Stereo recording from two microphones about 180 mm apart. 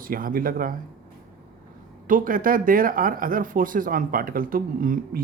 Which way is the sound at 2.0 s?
50° right (ahead or behind).